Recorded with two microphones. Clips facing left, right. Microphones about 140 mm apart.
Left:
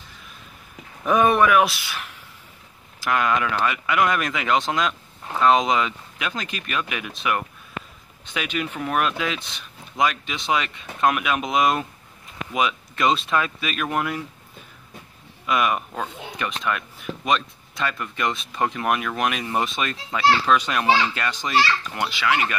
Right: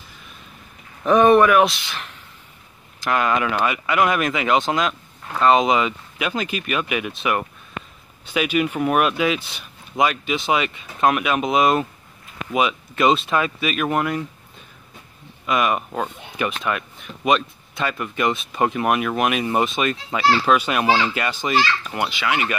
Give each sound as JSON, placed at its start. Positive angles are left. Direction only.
{"t": 1.0, "sound": "speech", "side_deg": 5}
{"t": 15.4, "sound": "speech", "side_deg": 0}